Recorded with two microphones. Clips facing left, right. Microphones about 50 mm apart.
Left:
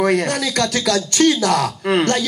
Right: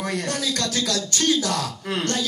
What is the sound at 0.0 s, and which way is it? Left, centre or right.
A man's voice, left.